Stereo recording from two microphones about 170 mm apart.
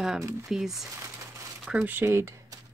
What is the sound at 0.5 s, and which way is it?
Speech, centre (ahead or behind).